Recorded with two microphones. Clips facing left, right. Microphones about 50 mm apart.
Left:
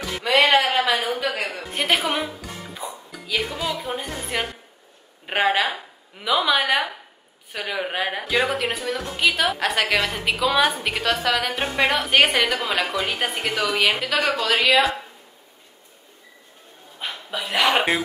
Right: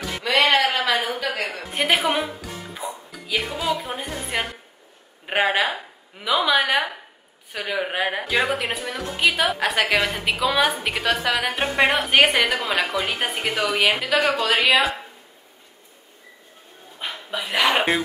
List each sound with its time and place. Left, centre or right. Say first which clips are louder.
0.3 s music: left 1 dB; left
0.6 s a sound: left 1 dB; centre
1.5 s a woman's voice: right 1 dB; centre
17.0 s dog: even; centre